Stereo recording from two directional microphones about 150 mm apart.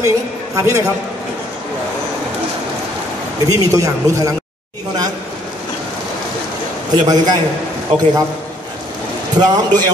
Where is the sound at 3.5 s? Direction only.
20° right (ahead or behind).